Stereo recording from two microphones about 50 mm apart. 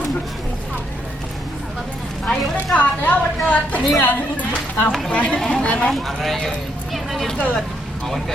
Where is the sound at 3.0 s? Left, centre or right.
Left.